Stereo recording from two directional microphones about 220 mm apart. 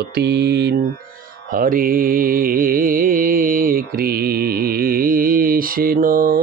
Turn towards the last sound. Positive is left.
turn(degrees=-40)  # may be behind; listen again after turning